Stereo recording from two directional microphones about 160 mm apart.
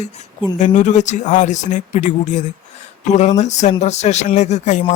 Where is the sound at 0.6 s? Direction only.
50° left (ahead or behind).